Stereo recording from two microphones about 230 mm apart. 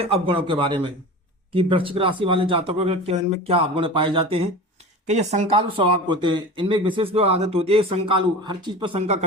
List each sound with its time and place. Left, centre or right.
0.0 s speech: right